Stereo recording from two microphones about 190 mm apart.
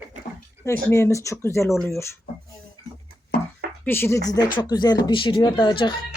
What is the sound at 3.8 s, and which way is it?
Speech, 10° left (ahead or behind).